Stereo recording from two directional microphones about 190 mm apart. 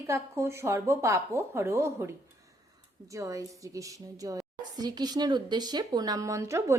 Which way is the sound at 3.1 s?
15° right (ahead or behind).